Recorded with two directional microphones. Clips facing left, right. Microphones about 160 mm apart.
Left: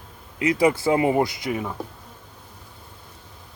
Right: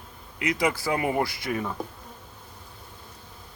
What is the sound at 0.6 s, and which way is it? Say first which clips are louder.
Speech: left 7 dB; 25° left (ahead or behind).